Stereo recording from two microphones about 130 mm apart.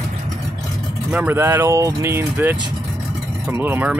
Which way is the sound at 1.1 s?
15° right (ahead or behind).